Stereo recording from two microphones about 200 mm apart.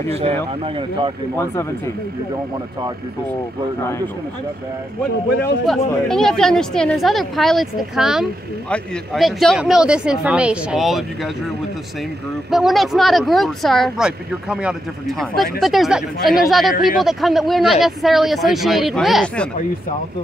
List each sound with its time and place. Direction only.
0.1 s speech: 30° right (ahead or behind)
6.0 s speech: 5° left (ahead or behind)
12.4 s speech: centre (ahead or behind)